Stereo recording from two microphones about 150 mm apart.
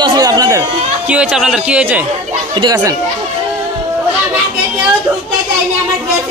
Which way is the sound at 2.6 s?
25° right (ahead or behind).